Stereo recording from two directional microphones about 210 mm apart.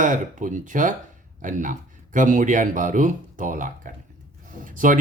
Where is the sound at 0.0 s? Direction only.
40° right (ahead or behind).